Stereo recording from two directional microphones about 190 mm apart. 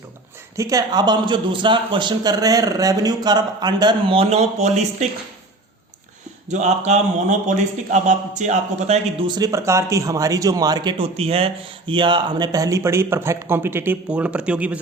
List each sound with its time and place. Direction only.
0.5 s a man's voice: 15° right (ahead or behind); by 5.0 s 35° right (ahead or behind)
6.5 s a man's voice: 40° right (ahead or behind)
9.2 s speech: 20° right (ahead or behind); by 14.8 s 5° right (ahead or behind)